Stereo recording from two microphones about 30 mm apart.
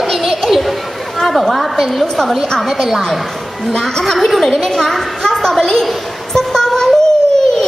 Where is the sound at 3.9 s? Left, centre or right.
Centre.